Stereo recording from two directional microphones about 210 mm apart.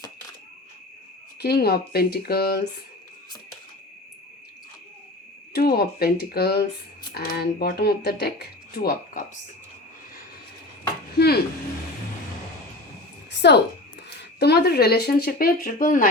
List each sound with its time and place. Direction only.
1.4 s speech: 50° left (ahead or behind)
5.5 s speech: 50° left (ahead or behind)
11.2 s speech: 50° left (ahead or behind)
13.3 s a sound: 55° left (ahead or behind)
14.2 s speech: 50° left (ahead or behind)